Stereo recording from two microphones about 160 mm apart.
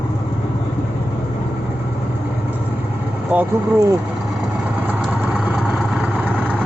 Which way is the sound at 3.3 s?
10° right (ahead or behind).